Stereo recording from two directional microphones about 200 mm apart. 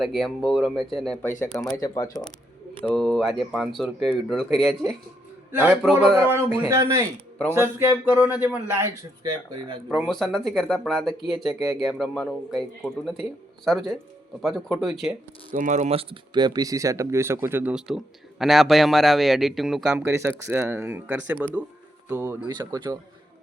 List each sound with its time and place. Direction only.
0.0 s speech: centre (ahead or behind)
1.7 s speech: 15° left (ahead or behind)
2.8 s speech: centre (ahead or behind)
5.5 s speech: 10° right (ahead or behind)
6.7 s speech: 15° right (ahead or behind)
9.9 s speech: centre (ahead or behind)
15.5 s speech: 40° right (ahead or behind); by 23.0 s 20° right (ahead or behind)